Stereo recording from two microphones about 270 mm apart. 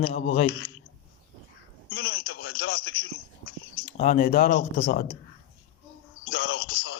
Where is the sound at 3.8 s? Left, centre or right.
Left.